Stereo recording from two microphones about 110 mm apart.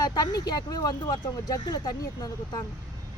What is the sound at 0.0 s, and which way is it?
Speech, 35° left (ahead or behind).